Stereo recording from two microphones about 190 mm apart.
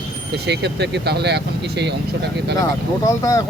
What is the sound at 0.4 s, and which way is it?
Speech, 65° right (ahead or behind).